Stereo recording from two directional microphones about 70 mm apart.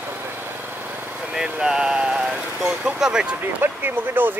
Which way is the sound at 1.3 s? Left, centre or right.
Centre.